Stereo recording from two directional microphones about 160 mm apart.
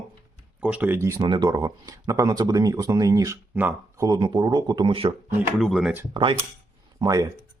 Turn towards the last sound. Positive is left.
turn(degrees=-20)  # may be behind; listen again after turning